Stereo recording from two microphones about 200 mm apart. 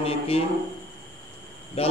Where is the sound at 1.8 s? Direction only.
30° left (ahead or behind).